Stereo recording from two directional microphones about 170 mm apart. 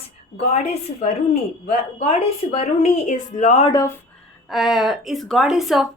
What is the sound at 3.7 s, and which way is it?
Speech, 20° left (ahead or behind).